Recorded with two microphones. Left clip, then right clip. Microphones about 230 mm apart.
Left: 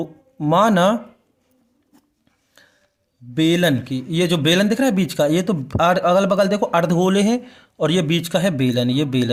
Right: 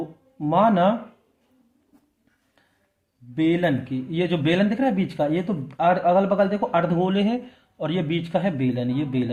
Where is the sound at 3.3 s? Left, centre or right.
Left.